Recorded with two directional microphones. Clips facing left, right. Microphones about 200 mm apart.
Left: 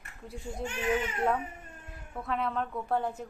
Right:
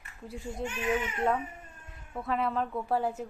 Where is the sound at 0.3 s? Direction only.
Centre (ahead or behind).